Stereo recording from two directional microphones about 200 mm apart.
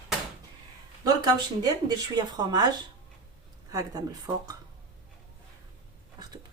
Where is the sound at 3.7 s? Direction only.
20° right (ahead or behind).